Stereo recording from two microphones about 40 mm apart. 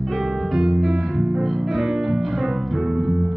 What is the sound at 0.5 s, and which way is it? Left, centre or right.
Music, centre.